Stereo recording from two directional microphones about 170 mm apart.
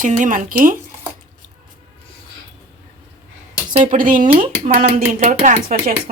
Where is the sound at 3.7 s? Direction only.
50° right (ahead or behind).